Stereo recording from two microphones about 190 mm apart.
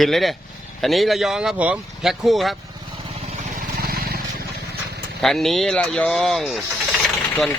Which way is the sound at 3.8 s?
55° right (ahead or behind).